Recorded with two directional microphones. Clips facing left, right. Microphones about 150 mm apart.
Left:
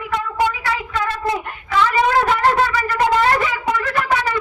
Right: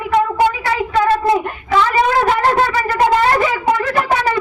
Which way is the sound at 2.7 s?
30° right (ahead or behind).